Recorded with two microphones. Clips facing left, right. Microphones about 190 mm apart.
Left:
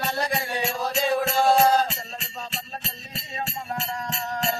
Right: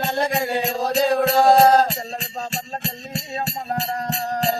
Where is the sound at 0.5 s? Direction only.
40° right (ahead or behind).